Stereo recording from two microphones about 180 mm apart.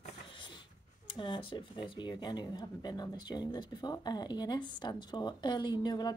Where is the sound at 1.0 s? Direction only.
25° left (ahead or behind).